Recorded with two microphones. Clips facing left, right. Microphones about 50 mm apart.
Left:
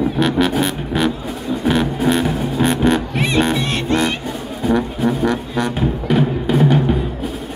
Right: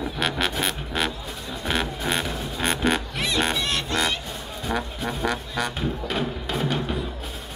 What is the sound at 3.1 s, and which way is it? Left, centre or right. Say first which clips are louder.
Music: left 8 dB; left.